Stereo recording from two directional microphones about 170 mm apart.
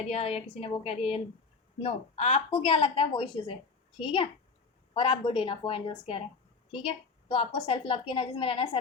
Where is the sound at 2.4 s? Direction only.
30° left (ahead or behind).